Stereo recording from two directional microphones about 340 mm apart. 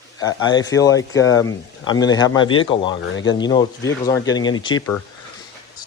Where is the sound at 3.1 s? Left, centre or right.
Left.